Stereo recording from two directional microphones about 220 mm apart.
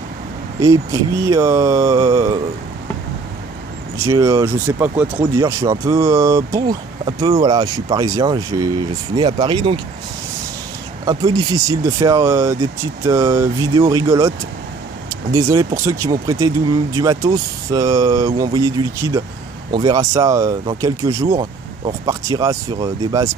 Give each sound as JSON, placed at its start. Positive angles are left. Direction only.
{"t": 1.2, "sound": "speech", "side_deg": -15}
{"t": 4.0, "sound": "speech", "side_deg": -15}
{"t": 11.1, "sound": "speech", "side_deg": -15}
{"t": 15.3, "sound": "speech", "side_deg": -15}